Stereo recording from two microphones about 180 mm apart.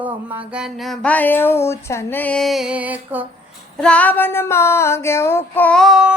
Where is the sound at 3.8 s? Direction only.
5° left (ahead or behind).